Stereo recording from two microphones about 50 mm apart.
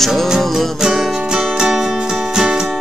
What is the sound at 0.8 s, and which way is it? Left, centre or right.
Music, centre.